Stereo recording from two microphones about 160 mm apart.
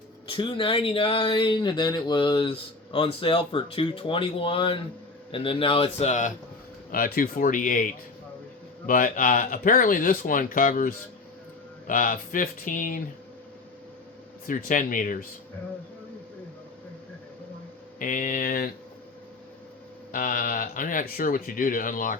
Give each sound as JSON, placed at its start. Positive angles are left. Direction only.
{"t": 0.3, "sound": "speech", "side_deg": 30}
{"t": 6.9, "sound": "speech", "side_deg": 65}
{"t": 8.9, "sound": "speech", "side_deg": 60}
{"t": 14.4, "sound": "speech", "side_deg": 55}
{"t": 18.0, "sound": "speech", "side_deg": 55}
{"t": 20.1, "sound": "speech", "side_deg": 60}